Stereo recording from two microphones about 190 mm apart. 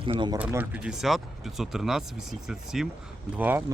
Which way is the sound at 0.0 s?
25° right (ahead or behind).